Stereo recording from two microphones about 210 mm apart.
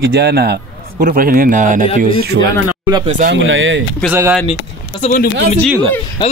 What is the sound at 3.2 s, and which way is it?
Speech, 65° right (ahead or behind).